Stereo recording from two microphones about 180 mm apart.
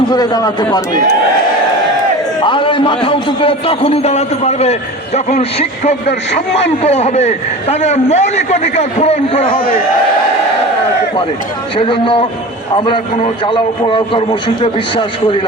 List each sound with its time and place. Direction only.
0.1 s a man's voice: 20° left (ahead or behind)
2.4 s a man's voice: 25° left (ahead or behind)
9.5 s a man's voice: 55° left (ahead or behind)
11.8 s a man's voice: 30° left (ahead or behind)